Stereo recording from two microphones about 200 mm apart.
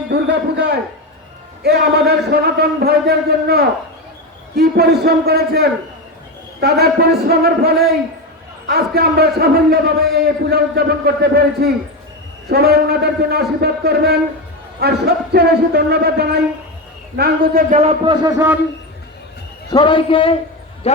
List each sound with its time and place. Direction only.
0.1 s a sound: 55° right (ahead or behind)
1.6 s a man's voice: 55° right (ahead or behind); by 18.6 s 10° right (ahead or behind)
19.7 s a man's voice: 25° left (ahead or behind)